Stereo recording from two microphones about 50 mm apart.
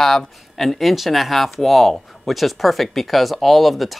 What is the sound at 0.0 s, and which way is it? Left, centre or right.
Speech, centre.